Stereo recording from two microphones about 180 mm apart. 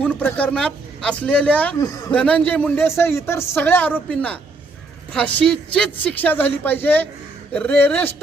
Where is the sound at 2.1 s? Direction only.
5° left (ahead or behind).